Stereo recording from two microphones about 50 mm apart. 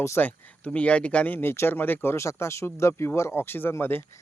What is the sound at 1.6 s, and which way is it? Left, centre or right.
Speech, left.